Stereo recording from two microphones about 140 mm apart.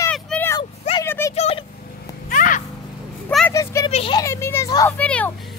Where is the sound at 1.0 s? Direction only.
15° left (ahead or behind).